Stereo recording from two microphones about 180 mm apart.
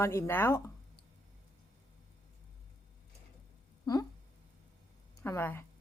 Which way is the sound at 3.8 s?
20° left (ahead or behind).